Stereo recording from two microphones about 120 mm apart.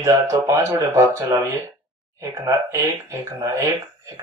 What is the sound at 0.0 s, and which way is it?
A man's voice, 25° right (ahead or behind).